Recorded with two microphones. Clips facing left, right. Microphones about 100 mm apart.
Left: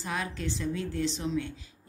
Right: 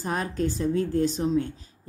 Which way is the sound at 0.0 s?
40° right (ahead or behind).